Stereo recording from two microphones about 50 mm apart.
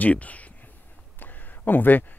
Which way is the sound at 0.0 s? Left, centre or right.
Left.